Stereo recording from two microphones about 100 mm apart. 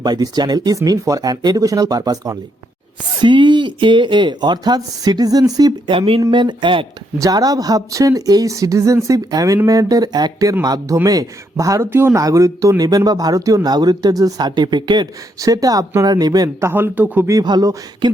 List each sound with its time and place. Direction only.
0.0 s speech: 45° right (ahead or behind)
3.2 s speech: 50° right (ahead or behind)
5.9 s speech: 65° right (ahead or behind)
6.3 s speech: 55° right (ahead or behind)
7.2 s speech: 35° right (ahead or behind)
15.4 s speech: 35° right (ahead or behind)
16.6 s speech: 25° right (ahead or behind)
17.4 s speech: 45° right (ahead or behind)